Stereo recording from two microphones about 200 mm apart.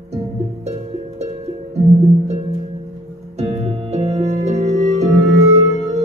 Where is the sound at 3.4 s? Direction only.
35° right (ahead or behind).